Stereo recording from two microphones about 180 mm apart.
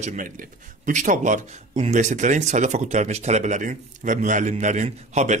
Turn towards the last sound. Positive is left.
turn(degrees=-40)  # may be behind; listen again after turning